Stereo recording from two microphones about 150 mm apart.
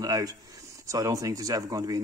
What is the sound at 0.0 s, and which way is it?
Speech, 25° right (ahead or behind).